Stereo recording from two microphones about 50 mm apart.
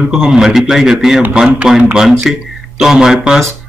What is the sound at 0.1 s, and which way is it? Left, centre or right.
A man's voice, centre.